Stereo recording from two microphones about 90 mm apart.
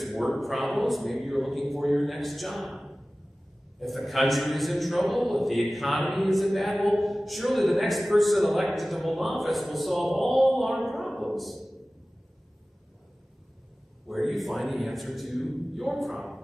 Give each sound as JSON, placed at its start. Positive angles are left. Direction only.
{"t": 0.0, "sound": "a man's voice", "side_deg": 0}
{"t": 14.0, "sound": "a man's voice", "side_deg": 0}